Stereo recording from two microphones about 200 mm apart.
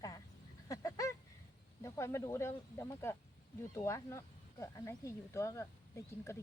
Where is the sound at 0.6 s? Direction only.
15° left (ahead or behind).